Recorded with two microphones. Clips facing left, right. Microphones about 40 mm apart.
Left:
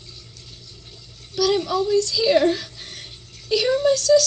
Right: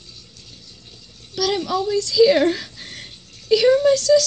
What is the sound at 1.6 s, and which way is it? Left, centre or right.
Speech, right.